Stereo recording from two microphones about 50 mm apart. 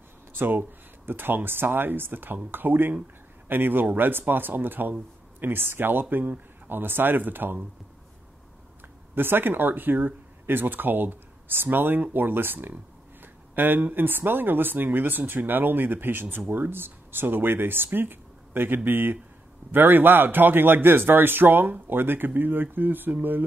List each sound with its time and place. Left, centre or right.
0.4 s speech: right
9.1 s speech: right
13.2 s a sound: right
13.9 s speech: right